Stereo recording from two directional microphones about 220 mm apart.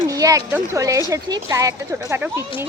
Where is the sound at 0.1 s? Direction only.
15° right (ahead or behind).